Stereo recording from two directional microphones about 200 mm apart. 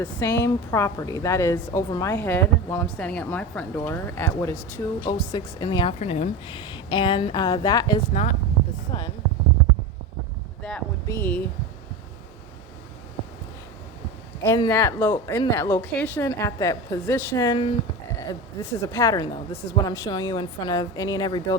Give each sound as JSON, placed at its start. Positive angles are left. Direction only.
{"t": 0.0, "sound": "a woman's voice", "side_deg": 10}
{"t": 8.1, "sound": "speech", "side_deg": 35}
{"t": 8.9, "sound": "speech", "side_deg": 20}
{"t": 10.6, "sound": "a sound", "side_deg": 5}
{"t": 11.0, "sound": "speech", "side_deg": 10}
{"t": 14.4, "sound": "a woman's voice", "side_deg": 15}
{"t": 18.2, "sound": "a woman's voice", "side_deg": 15}